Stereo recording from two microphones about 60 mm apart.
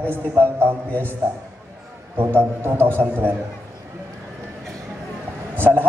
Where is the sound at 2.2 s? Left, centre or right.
Right.